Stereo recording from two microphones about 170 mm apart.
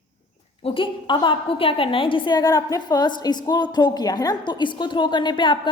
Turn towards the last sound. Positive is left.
turn(degrees=30)  # may be behind; listen again after turning